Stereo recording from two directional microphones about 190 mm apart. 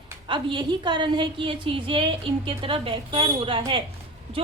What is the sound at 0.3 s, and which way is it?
A woman's voice, 25° right (ahead or behind).